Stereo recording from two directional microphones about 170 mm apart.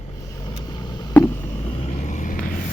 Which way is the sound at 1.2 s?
10° left (ahead or behind).